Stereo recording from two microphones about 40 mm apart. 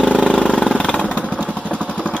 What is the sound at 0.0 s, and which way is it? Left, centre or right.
Vehicle, left.